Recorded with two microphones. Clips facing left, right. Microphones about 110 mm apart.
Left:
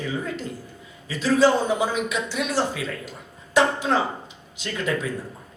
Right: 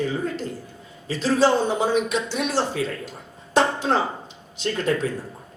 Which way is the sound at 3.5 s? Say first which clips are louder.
Even; 30° right (ahead or behind).